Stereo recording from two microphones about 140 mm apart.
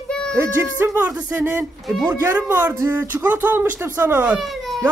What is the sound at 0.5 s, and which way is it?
Speech, 15° right (ahead or behind).